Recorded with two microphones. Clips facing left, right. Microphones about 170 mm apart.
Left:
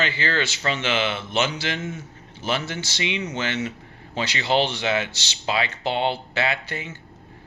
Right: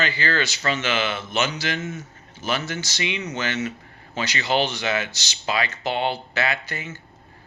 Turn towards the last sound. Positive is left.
turn(degrees=30)  # may be behind; listen again after turning